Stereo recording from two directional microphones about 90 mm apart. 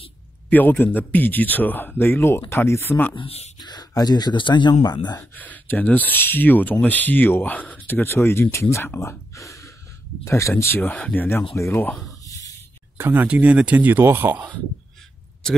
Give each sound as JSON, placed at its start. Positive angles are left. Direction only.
{"t": 0.5, "sound": "speech", "side_deg": 20}
{"t": 3.5, "sound": "speech", "side_deg": 50}
{"t": 5.3, "sound": "speech", "side_deg": 20}
{"t": 11.5, "sound": "speech", "side_deg": 35}
{"t": 12.9, "sound": "speech", "side_deg": -25}